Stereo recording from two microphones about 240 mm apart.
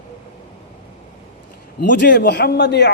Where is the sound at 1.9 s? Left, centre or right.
Left.